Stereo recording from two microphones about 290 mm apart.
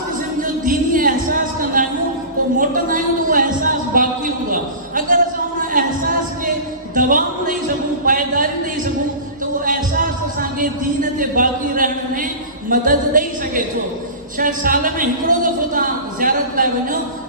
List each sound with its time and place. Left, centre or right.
0.4 s a sound: right
1.8 s music: right
2.6 s speech: right
4.5 s a sound: right
8.0 s speech: right
10.6 s a woman's voice: right